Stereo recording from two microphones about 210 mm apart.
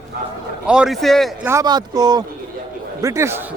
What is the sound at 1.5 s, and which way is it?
Speech, 15° right (ahead or behind).